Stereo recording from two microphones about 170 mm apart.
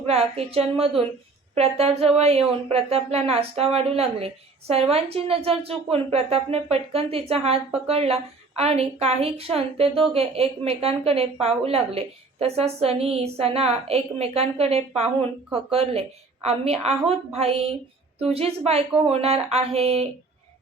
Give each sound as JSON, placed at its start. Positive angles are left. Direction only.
{"t": 0.0, "sound": "a woman's voice", "side_deg": -35}